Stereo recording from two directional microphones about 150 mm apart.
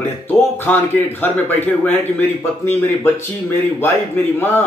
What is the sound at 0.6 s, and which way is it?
Speech, 15° left (ahead or behind).